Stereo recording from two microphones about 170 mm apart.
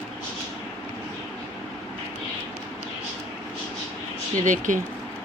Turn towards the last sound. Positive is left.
turn(degrees=-50)  # may be behind; listen again after turning